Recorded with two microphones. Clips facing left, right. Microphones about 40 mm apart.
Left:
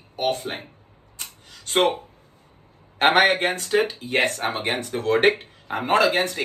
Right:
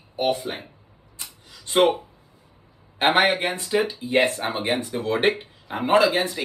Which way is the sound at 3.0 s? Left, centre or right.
Left.